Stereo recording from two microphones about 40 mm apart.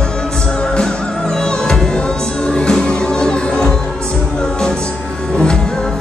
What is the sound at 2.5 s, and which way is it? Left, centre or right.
Music, centre.